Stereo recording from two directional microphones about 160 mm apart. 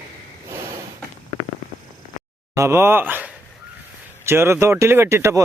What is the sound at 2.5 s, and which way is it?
Speech, 15° right (ahead or behind).